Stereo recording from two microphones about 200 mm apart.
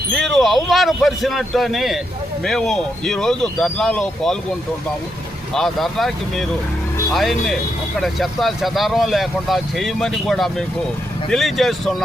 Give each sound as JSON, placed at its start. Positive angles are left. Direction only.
{"t": 0.1, "sound": "speech", "side_deg": 0}
{"t": 5.5, "sound": "speech", "side_deg": 0}